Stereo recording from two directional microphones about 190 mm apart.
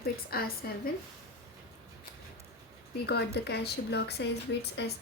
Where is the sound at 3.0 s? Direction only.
60° left (ahead or behind).